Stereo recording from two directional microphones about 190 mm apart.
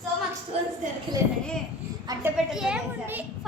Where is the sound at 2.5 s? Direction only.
5° right (ahead or behind).